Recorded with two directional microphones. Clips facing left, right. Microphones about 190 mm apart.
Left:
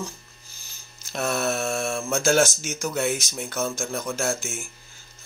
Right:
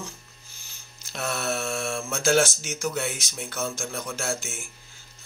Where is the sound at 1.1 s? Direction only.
45° left (ahead or behind).